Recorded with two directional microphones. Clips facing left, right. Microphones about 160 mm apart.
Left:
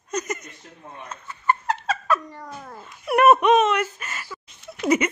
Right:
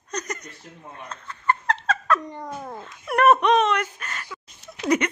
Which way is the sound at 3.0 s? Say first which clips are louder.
Left 2 dB; 10° left (ahead or behind).